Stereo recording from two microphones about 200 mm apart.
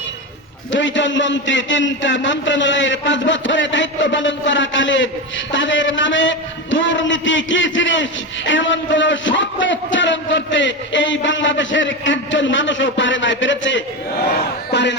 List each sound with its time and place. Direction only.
0.7 s a man's voice: 65° left (ahead or behind)
14.7 s music: 60° left (ahead or behind)